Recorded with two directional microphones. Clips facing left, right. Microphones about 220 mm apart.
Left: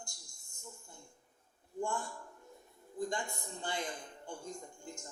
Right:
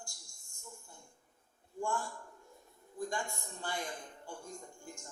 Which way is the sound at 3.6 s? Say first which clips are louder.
Left 1 dB; 20° left (ahead or behind).